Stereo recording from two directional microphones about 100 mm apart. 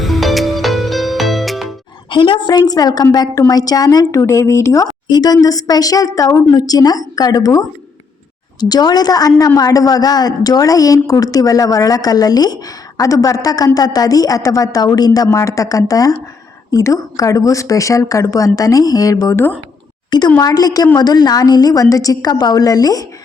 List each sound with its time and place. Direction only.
0.0 s music: centre (ahead or behind)
2.0 s a woman's voice: 55° left (ahead or behind); by 7.7 s 35° left (ahead or behind)
8.7 s a woman's voice: 40° left (ahead or behind)